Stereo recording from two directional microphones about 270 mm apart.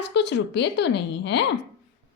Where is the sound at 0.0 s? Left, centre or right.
Left.